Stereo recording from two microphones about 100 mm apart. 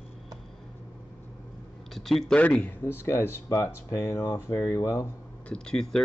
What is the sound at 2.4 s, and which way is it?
Speech, 15° left (ahead or behind).